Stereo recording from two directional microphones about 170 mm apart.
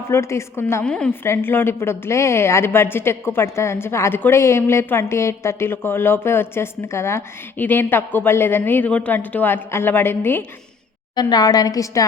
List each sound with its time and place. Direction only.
0.1 s a woman's voice: 15° left (ahead or behind)
11.1 s a woman's voice: 25° left (ahead or behind)